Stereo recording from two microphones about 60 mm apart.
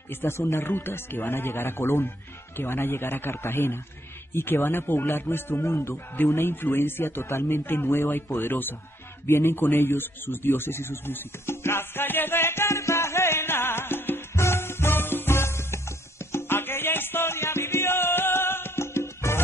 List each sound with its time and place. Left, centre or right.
0.1 s speech: left
0.4 s speech: left
9.2 s a sound: left
16.3 s music: left